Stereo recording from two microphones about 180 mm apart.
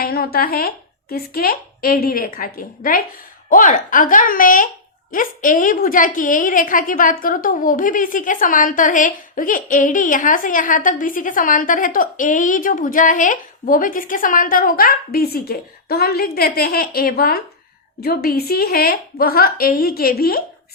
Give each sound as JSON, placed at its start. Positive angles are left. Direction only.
{"t": 0.0, "sound": "a woman's voice", "side_deg": 55}